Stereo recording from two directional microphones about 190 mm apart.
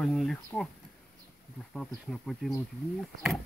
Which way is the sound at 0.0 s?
Centre (ahead or behind).